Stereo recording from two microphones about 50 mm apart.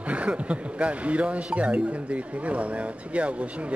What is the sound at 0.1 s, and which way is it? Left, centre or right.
A man's voice, right.